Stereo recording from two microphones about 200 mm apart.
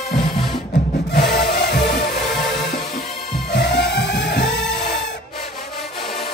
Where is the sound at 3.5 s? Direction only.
60° left (ahead or behind).